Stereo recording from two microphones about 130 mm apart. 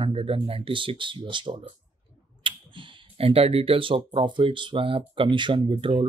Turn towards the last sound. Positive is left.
turn(degrees=-40)  # may be behind; listen again after turning